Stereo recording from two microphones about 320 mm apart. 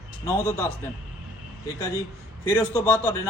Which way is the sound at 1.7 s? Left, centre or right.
Centre.